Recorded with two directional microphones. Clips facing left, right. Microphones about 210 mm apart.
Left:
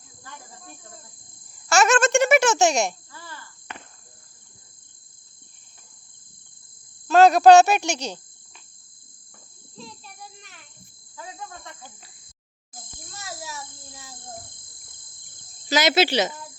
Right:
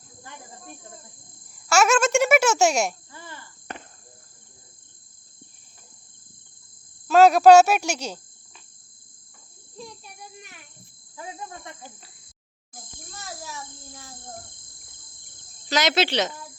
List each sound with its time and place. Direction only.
1.6 s a child's voice: 5° right (ahead or behind)
3.1 s insect: 20° right (ahead or behind)
7.1 s speech: 5° right (ahead or behind)
9.7 s child singing: 15° right (ahead or behind)
11.2 s insect: 20° right (ahead or behind)
13.2 s a sound: 10° left (ahead or behind)
15.7 s speech: 5° left (ahead or behind)